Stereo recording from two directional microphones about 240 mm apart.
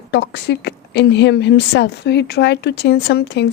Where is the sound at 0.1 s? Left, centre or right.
Left.